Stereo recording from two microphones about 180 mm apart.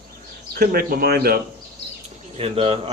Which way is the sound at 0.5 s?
60° right (ahead or behind).